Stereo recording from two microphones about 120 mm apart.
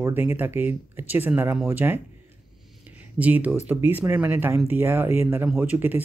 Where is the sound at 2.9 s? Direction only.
10° right (ahead or behind).